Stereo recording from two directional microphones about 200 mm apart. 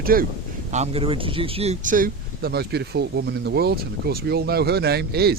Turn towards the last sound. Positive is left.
turn(degrees=-50)  # may be behind; listen again after turning